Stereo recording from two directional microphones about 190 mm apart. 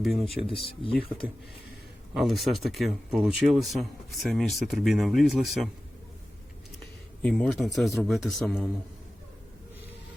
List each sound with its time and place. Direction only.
0.0 s speech: centre (ahead or behind)
0.6 s speech: 30° left (ahead or behind)
2.1 s speech: centre (ahead or behind)
7.2 s speech: 5° left (ahead or behind)